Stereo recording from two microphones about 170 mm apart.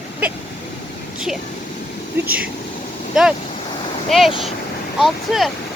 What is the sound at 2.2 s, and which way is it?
Speech, 60° right (ahead or behind).